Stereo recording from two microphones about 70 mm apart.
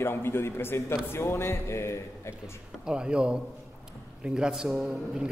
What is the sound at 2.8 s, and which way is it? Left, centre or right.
A man's voice, centre.